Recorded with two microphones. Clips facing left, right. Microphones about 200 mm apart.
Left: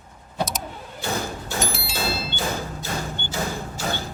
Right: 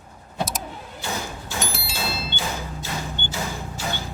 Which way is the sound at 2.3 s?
45° left (ahead or behind).